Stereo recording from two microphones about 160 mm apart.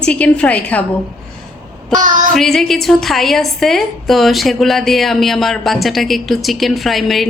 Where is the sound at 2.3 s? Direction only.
Centre (ahead or behind).